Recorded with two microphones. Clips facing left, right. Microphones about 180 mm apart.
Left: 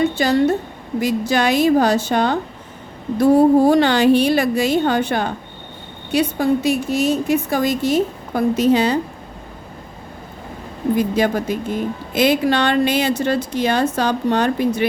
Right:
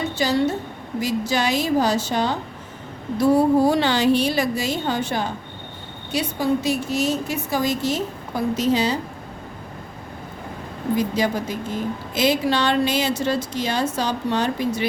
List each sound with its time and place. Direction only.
0.2 s a woman's voice: 55° left (ahead or behind)
10.9 s a woman's voice: 55° left (ahead or behind)